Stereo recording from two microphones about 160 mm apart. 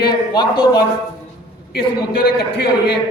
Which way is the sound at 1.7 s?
70° left (ahead or behind).